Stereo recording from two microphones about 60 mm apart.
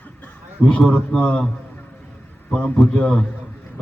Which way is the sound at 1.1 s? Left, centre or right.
Centre.